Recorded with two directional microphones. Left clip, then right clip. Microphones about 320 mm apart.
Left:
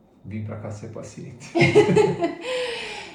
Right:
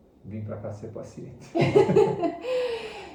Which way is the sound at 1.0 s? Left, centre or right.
Left.